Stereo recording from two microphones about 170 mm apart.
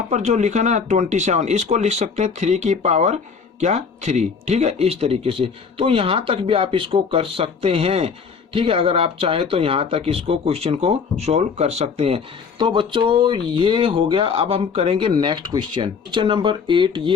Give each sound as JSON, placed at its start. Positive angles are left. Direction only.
{"t": 0.1, "sound": "speech", "side_deg": -40}